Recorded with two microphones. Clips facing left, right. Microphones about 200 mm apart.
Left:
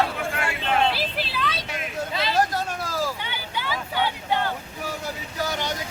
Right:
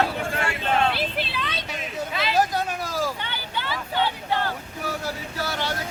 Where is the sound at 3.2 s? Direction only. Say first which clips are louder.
Even; 10° left (ahead or behind).